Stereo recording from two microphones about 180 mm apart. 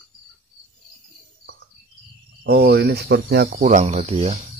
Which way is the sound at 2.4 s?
65° right (ahead or behind).